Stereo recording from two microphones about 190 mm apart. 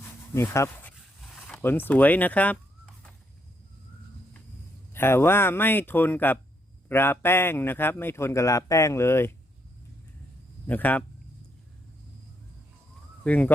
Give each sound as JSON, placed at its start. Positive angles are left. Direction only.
{"t": 0.3, "sound": "a man's voice", "side_deg": 15}
{"t": 1.3, "sound": "chicken", "side_deg": 5}
{"t": 4.9, "sound": "a man's voice", "side_deg": 10}
{"t": 10.7, "sound": "a man's voice", "side_deg": 10}
{"t": 13.2, "sound": "a man's voice", "side_deg": 5}